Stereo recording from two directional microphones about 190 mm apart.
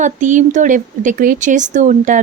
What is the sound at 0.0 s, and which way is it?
A woman's voice, 40° right (ahead or behind).